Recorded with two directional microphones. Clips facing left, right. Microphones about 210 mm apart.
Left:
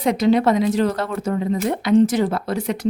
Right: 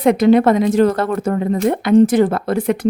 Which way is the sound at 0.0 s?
55° right (ahead or behind).